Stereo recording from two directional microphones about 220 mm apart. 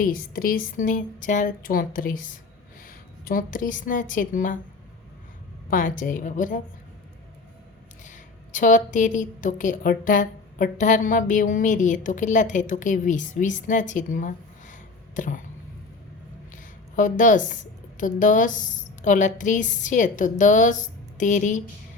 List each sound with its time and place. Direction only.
0.0 s a woman's voice: 40° left (ahead or behind)
5.7 s a woman's voice: 35° left (ahead or behind)
8.0 s a woman's voice: 35° left (ahead or behind)
16.5 s a sound: 35° left (ahead or behind)
17.9 s a woman's voice: 35° left (ahead or behind)